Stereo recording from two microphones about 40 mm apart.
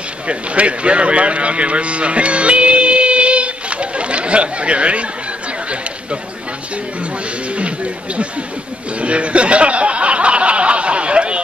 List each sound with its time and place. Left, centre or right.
0.3 s a man's voice: right
7.5 s speech: right
9.0 s a sound: right